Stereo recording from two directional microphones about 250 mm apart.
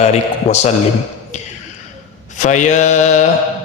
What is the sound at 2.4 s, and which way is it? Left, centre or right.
Speech, left.